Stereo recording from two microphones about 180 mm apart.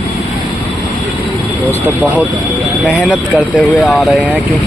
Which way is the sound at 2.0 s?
10° right (ahead or behind).